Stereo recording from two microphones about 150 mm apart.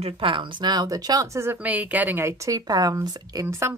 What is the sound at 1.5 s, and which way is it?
A woman's voice, 10° right (ahead or behind).